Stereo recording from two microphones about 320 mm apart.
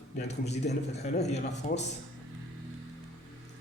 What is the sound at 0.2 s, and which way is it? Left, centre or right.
A man's voice, left.